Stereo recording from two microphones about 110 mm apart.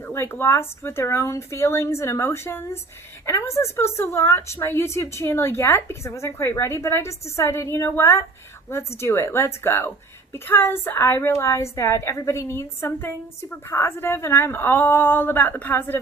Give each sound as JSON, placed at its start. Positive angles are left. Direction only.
{"t": 0.1, "sound": "a woman's voice", "side_deg": 20}